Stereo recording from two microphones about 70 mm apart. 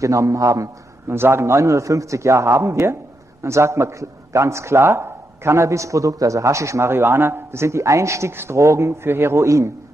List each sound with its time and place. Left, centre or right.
0.0 s a man's voice: right
1.0 s a man's voice: right